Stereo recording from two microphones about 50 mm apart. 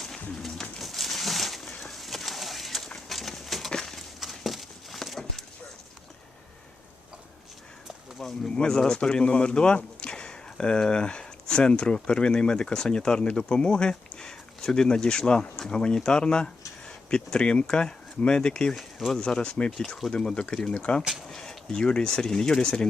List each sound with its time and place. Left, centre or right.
0.3 s pigeon: centre
1.8 s bird: centre
3.7 s a sound: centre
8.4 s speech: centre
18.8 s a sound: centre
19.1 s speech: centre
21.2 s speech: centre